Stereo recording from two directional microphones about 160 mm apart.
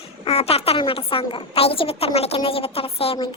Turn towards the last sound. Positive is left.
turn(degrees=30)  # may be behind; listen again after turning